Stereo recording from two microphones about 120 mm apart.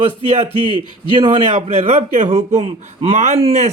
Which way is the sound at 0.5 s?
45° left (ahead or behind).